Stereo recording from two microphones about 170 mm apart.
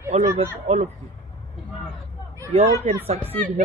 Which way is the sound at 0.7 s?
40° right (ahead or behind).